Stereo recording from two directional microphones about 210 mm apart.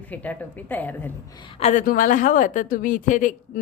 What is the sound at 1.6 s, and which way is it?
A woman's voice, 35° left (ahead or behind).